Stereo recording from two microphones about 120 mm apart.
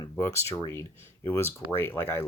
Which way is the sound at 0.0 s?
25° left (ahead or behind).